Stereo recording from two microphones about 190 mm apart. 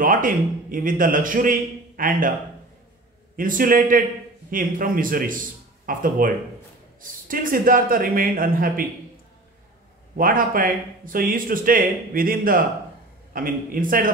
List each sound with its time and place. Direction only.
0.0 s speech: 45° right (ahead or behind)
3.3 s speech: 45° right (ahead or behind)
10.1 s speech: 45° right (ahead or behind)